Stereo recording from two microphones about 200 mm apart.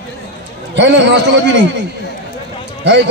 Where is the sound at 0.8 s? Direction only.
60° right (ahead or behind).